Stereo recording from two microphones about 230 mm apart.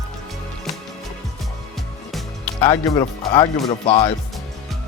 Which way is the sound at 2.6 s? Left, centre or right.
Centre.